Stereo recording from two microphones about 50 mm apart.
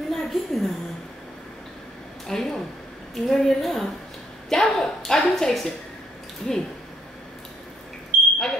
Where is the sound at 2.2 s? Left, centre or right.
Centre.